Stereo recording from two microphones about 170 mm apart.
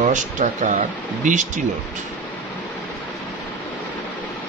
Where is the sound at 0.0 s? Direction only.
45° right (ahead or behind).